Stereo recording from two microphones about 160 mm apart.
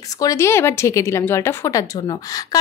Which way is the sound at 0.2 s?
20° left (ahead or behind).